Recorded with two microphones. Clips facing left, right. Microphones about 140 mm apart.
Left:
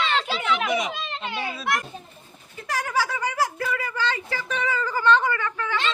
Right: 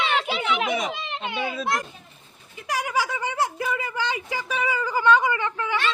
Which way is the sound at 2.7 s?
15° right (ahead or behind).